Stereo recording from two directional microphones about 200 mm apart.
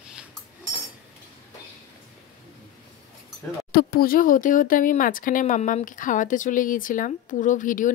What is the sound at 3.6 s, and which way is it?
Speech, 50° left (ahead or behind).